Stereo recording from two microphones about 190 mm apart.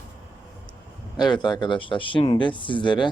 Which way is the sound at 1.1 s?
20° left (ahead or behind).